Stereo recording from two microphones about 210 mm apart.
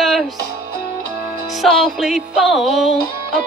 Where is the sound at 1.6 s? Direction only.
Centre (ahead or behind).